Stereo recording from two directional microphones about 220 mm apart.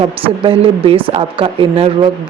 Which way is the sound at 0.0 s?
25° right (ahead or behind).